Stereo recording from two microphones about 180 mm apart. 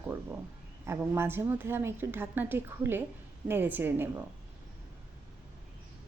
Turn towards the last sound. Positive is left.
turn(degrees=-10)  # may be behind; listen again after turning